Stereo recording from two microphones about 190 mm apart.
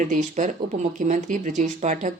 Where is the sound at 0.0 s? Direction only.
40° right (ahead or behind).